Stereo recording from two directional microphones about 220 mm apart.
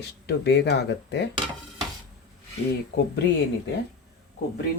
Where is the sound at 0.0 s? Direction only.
50° left (ahead or behind).